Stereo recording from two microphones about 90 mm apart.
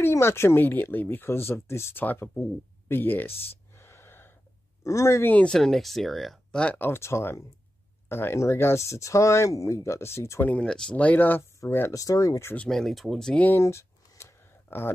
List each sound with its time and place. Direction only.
0.0 s speech: 30° left (ahead or behind)
2.9 s a sound: 20° left (ahead or behind)
4.8 s speech: 35° left (ahead or behind)
5.3 s speech: 10° left (ahead or behind)
6.6 s speech: 20° left (ahead or behind)
10.4 s speech: 10° left (ahead or behind)
11.9 s speech: 40° left (ahead or behind)
12.6 s speech: 5° left (ahead or behind)
13.6 s a sound: 30° left (ahead or behind)